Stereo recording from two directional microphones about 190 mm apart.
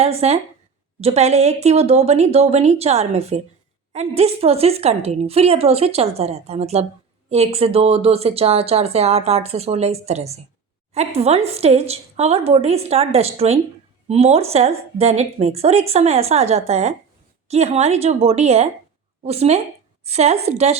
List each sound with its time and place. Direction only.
0.0 s speech: 35° right (ahead or behind)